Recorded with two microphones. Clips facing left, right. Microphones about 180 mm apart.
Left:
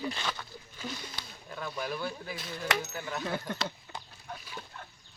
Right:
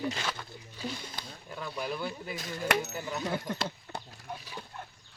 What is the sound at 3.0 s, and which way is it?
Speech, 10° right (ahead or behind).